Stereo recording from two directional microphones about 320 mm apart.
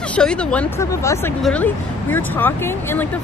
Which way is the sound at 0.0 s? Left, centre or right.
Centre.